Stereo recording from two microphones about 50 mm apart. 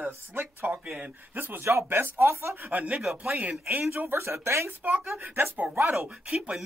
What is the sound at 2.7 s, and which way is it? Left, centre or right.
Speech, right.